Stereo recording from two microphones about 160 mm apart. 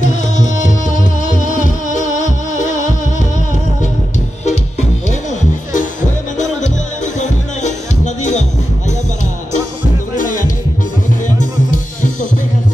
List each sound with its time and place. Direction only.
0.7 s music: 50° left (ahead or behind)
6.3 s music: 45° left (ahead or behind)
10.1 s music: 55° left (ahead or behind)
11.7 s music: 50° left (ahead or behind)